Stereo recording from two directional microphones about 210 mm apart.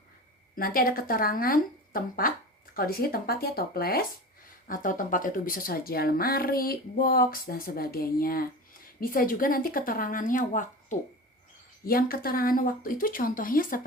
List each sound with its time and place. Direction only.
0.5 s a woman's voice: 45° left (ahead or behind)